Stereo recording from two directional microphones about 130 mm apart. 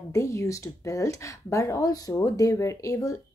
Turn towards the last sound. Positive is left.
turn(degrees=25)  # may be behind; listen again after turning